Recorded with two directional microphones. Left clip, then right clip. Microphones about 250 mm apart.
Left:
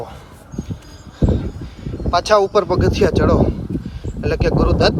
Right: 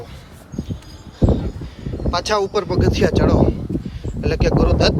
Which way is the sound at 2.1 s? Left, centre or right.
Centre.